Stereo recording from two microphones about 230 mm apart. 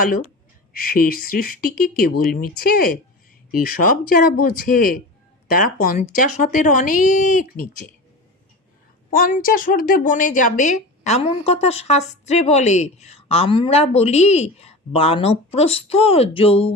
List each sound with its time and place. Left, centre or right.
0.7 s speech: left
9.0 s a woman's voice: left